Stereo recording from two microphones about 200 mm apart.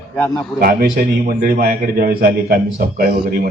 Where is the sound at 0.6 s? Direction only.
50° right (ahead or behind).